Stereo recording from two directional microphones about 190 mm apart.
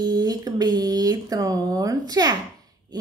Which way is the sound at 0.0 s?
20° right (ahead or behind).